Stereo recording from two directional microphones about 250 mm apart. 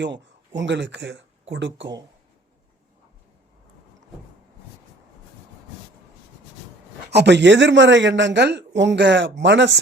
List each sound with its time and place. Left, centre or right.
0.0 s speech: right
7.1 s a man's voice: right